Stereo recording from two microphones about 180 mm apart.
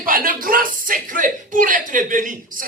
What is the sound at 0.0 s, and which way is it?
Speech, 50° right (ahead or behind).